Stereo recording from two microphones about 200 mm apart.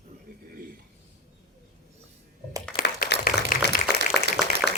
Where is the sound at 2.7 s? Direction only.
50° left (ahead or behind).